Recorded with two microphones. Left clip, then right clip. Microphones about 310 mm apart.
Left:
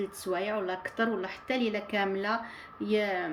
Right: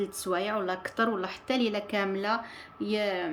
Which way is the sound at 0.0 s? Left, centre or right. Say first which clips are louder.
Right 2 dB; centre.